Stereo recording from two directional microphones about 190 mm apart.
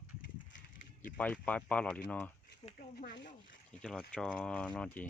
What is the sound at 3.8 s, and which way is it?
Speech, 5° left (ahead or behind).